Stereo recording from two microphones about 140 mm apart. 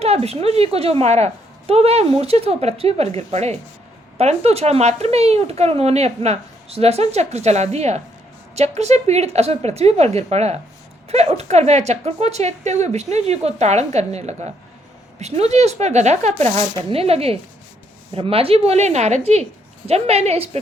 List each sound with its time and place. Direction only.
0.0 s speech: 45° right (ahead or behind)